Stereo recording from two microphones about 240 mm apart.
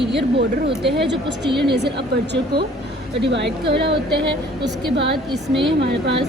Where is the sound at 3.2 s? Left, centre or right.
Right.